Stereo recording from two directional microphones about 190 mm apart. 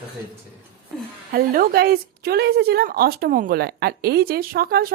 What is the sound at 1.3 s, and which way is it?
A woman's voice, 50° right (ahead or behind).